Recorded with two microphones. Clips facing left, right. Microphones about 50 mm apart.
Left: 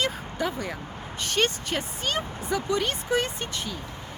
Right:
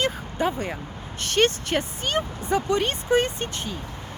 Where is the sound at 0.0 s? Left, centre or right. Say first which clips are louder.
Right 3 dB; right.